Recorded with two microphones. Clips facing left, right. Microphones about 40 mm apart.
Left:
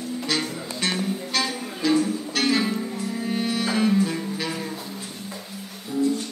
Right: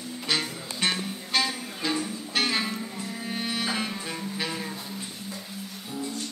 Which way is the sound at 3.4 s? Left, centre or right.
Centre.